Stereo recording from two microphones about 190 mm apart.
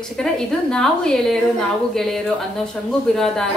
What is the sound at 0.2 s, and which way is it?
A woman's voice, 5° left (ahead or behind).